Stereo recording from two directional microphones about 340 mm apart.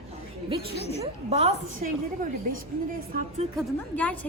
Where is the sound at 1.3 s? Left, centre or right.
Centre.